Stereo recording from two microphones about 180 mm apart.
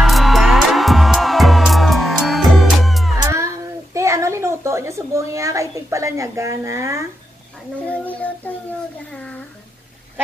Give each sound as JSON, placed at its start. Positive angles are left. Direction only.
{"t": 0.0, "sound": "music", "side_deg": 0}
{"t": 3.2, "sound": "a sound", "side_deg": -15}
{"t": 7.9, "sound": "child singing", "side_deg": 10}